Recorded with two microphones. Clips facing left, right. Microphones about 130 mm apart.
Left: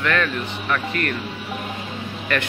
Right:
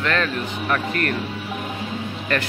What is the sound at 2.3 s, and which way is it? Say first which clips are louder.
Speech: even; 35° right (ahead or behind).